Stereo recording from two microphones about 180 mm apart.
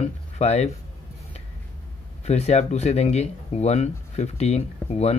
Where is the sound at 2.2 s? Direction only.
35° left (ahead or behind).